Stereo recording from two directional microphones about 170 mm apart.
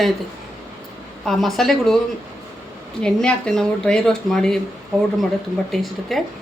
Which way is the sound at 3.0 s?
5° left (ahead or behind).